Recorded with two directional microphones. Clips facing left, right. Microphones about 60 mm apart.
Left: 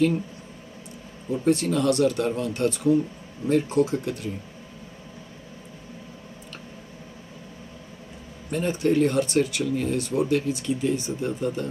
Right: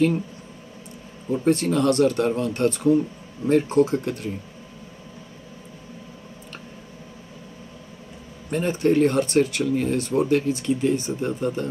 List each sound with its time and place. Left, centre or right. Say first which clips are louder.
1.3 s speech: right 2 dB; right
8.5 s speech: right 2 dB; right